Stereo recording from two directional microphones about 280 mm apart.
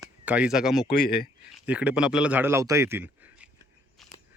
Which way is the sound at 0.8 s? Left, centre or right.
Left.